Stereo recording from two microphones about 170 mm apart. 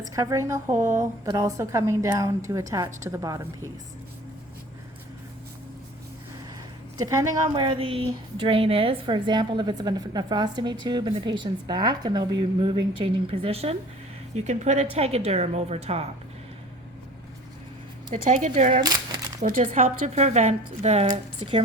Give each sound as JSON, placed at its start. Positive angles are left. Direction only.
{"t": 0.1, "sound": "a woman's voice", "side_deg": -20}
{"t": 6.9, "sound": "a woman's voice", "side_deg": -20}
{"t": 18.1, "sound": "speech", "side_deg": -45}
{"t": 20.1, "sound": "a woman's voice", "side_deg": -40}